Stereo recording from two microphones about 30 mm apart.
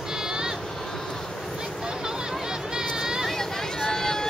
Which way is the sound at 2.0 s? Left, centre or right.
Right.